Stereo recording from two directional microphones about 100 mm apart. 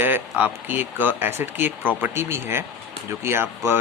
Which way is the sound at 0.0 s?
20° right (ahead or behind).